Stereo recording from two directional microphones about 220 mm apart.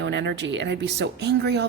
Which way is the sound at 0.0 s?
55° right (ahead or behind).